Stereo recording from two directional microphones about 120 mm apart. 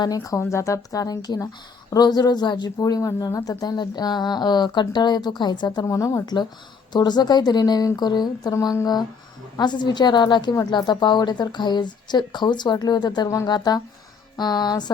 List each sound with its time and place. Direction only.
0.0 s a woman's voice: 30° left (ahead or behind)
8.5 s a woman's voice: 25° left (ahead or behind)